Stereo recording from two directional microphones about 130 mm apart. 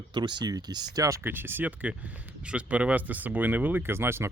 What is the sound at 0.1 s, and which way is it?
Speech, 35° right (ahead or behind).